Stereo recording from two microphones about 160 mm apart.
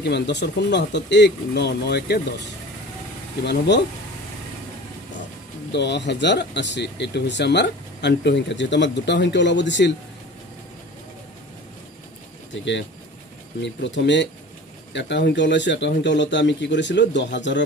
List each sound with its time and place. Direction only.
0.0 s speech: 90° left
3.4 s speech: 90° left
5.7 s speech: 90° left
13.6 s speech: 90° left